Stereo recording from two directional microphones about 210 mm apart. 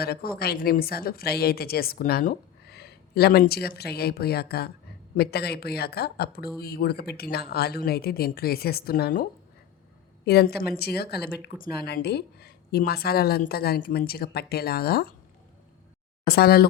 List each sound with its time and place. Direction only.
0.0 s speech: 45° left (ahead or behind)
10.2 s speech: 50° left (ahead or behind)
16.2 s speech: 50° left (ahead or behind)